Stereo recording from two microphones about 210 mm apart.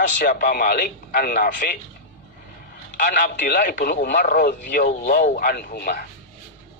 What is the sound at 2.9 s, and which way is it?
A man's voice, 40° left (ahead or behind).